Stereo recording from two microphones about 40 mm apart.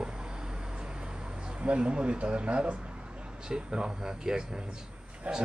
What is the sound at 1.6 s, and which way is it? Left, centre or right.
A man's voice, right.